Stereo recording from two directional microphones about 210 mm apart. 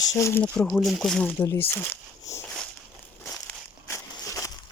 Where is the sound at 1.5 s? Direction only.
10° left (ahead or behind).